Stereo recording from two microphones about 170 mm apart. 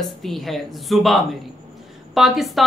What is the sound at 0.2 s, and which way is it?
A woman's voice, centre (ahead or behind).